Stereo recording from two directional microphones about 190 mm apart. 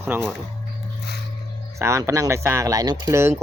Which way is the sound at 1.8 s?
15° right (ahead or behind).